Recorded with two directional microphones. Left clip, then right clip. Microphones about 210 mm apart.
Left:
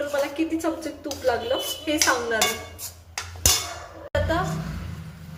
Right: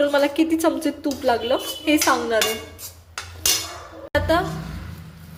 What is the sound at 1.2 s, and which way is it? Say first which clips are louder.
Dishes: right 3 dB; 40° right (ahead or behind).